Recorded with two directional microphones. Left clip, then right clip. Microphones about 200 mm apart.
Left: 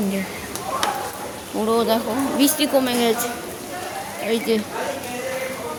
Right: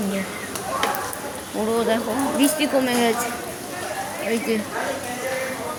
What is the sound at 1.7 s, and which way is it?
Speech, 30° left (ahead or behind).